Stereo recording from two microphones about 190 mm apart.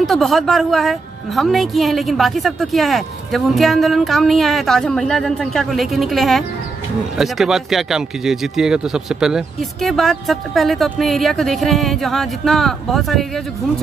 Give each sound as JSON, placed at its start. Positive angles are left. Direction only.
{"t": 0.0, "sound": "a woman's voice", "side_deg": 0}